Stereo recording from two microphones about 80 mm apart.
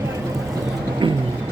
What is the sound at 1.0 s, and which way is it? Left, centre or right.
Music, right.